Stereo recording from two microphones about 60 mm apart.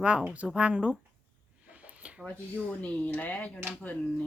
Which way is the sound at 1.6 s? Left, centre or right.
Right.